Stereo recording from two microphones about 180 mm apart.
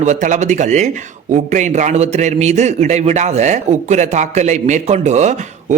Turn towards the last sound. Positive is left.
turn(degrees=-40)  # may be behind; listen again after turning